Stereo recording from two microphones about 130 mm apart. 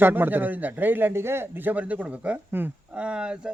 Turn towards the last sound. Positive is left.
turn(degrees=-5)  # may be behind; listen again after turning